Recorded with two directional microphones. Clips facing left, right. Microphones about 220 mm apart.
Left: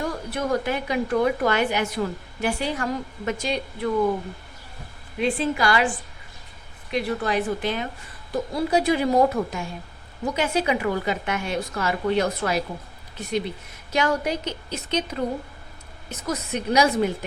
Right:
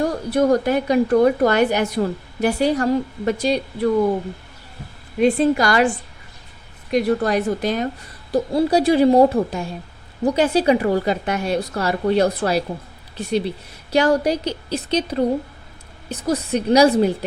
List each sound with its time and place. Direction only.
0.0 s a woman's voice: 35° right (ahead or behind)
5.2 s a woman's voice: 40° right (ahead or behind)
6.9 s a woman's voice: 45° right (ahead or behind)